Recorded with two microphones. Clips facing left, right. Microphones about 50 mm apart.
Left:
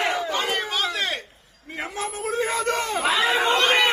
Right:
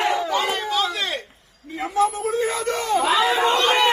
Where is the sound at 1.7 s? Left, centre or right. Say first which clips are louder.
Right 9 dB; left.